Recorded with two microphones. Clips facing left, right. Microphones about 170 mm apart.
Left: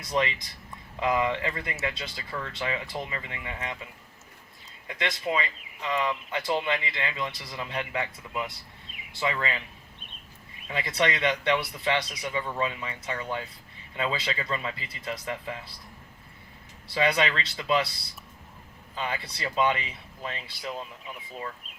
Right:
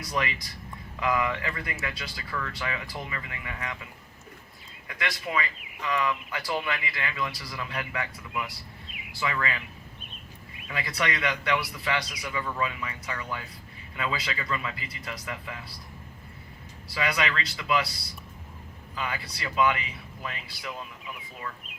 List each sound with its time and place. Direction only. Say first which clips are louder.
0.0 s speech: left 3 dB; 25° left (ahead or behind)
4.9 s speech: left 3 dB; 25° left (ahead or behind)
10.7 s speech: left 3 dB; 25° left (ahead or behind)
16.9 s speech: left 3 dB; 30° left (ahead or behind)
18.9 s speech: left 1 dB; 30° left (ahead or behind)